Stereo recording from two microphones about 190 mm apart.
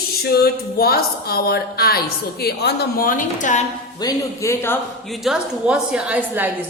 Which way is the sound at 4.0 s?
20° left (ahead or behind).